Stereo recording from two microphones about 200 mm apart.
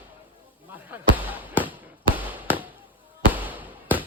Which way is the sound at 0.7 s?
10° right (ahead or behind).